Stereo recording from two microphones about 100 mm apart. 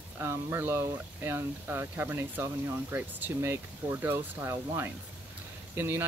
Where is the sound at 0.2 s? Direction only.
25° right (ahead or behind).